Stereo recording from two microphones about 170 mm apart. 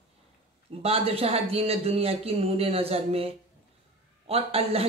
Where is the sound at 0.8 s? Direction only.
35° right (ahead or behind).